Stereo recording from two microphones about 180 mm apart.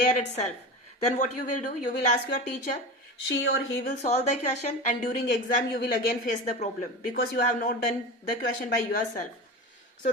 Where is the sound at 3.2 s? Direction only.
85° left.